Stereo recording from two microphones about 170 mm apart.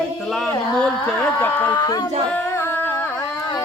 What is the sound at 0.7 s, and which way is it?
Speech, 5° left (ahead or behind).